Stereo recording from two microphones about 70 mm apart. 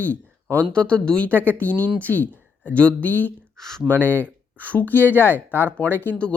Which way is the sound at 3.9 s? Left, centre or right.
Left.